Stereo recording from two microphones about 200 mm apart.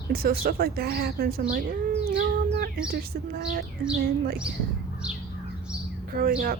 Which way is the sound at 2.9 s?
50° right (ahead or behind).